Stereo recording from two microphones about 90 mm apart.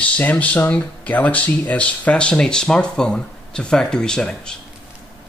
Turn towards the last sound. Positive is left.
turn(degrees=10)  # may be behind; listen again after turning